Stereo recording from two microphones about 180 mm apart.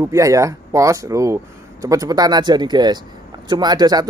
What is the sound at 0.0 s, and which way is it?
Speech, 15° right (ahead or behind).